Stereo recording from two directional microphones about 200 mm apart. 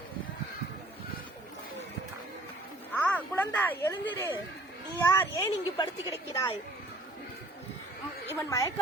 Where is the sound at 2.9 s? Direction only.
5° left (ahead or behind).